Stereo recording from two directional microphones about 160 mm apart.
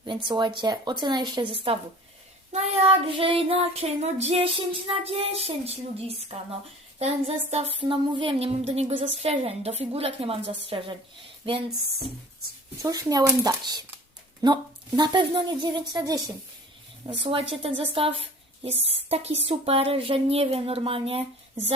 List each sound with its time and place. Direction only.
0.0 s a woman's voice: 30° right (ahead or behind)
2.5 s child singing: 40° right (ahead or behind)
12.8 s a woman's voice: 20° right (ahead or behind)
17.2 s child singing: 35° right (ahead or behind)
17.9 s a woman's voice: 35° right (ahead or behind)
18.8 s child singing: 40° right (ahead or behind)